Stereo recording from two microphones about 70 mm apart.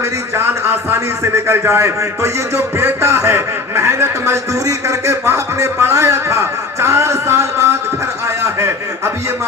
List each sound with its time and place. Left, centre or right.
0.3 s a man's voice: right